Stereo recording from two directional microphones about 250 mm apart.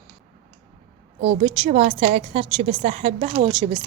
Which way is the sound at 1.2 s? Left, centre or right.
Right.